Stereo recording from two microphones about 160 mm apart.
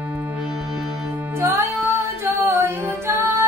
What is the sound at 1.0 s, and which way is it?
Music, 20° right (ahead or behind).